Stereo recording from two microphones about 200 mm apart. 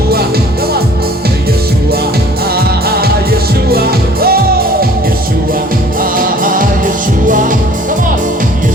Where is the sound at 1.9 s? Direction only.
50° right (ahead or behind).